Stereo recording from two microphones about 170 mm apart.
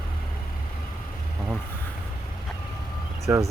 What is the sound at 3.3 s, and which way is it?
Speech, 10° right (ahead or behind).